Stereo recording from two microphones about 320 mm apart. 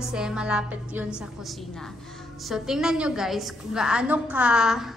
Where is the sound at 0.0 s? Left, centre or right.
Centre.